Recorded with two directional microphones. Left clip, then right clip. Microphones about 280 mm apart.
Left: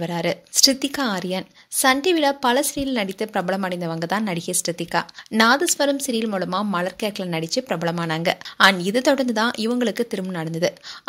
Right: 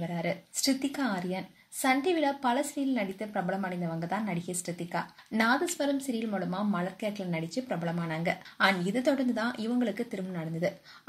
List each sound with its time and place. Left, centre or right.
0.0 s a woman's voice: left